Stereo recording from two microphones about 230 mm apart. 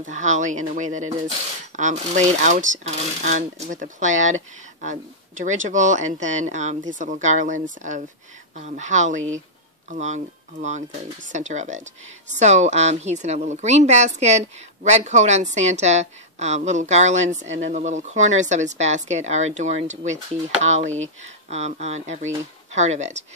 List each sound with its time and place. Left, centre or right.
0.1 s speech: right
5.4 s a woman's voice: right